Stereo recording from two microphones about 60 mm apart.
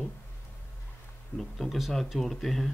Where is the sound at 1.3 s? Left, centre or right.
Centre.